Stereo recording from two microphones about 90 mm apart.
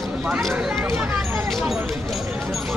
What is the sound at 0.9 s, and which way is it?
Speech, 25° right (ahead or behind).